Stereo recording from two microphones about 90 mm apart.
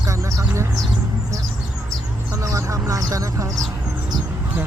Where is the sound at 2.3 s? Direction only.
40° right (ahead or behind).